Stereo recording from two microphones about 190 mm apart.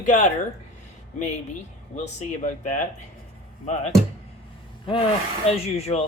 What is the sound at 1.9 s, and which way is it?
Speech, 40° left (ahead or behind).